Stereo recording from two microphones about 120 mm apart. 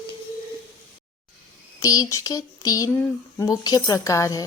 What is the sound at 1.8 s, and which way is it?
A woman's voice, 30° left (ahead or behind).